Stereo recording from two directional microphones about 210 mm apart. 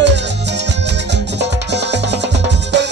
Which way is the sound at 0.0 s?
55° right (ahead or behind).